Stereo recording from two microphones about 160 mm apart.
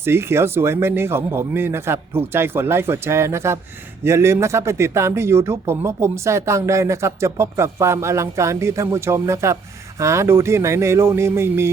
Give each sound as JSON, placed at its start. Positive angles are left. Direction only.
{"t": 0.0, "sound": "speech", "side_deg": -15}